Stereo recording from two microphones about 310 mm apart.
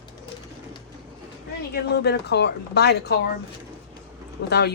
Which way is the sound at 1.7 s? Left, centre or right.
Left.